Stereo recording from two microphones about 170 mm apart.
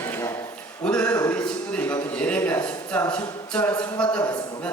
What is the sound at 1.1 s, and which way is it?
Speech, 20° left (ahead or behind).